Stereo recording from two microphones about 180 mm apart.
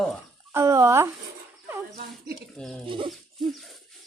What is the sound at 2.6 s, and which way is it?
Speech, 5° left (ahead or behind).